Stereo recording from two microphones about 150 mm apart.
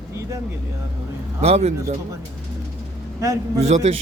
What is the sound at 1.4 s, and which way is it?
Speech, 45° right (ahead or behind).